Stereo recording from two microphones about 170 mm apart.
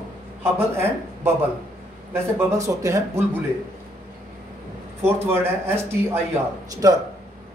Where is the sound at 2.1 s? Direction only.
15° right (ahead or behind).